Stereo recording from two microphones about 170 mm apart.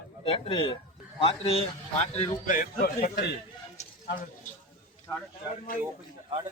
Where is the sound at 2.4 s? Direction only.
55° left (ahead or behind).